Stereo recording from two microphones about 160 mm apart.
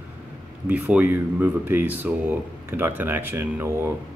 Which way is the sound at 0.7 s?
10° right (ahead or behind).